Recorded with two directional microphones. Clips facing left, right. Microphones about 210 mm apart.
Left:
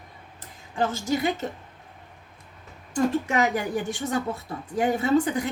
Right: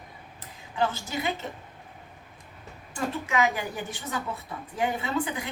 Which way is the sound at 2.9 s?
45° left (ahead or behind).